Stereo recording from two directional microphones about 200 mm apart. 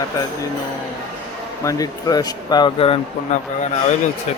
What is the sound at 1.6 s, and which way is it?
Speech, 20° left (ahead or behind).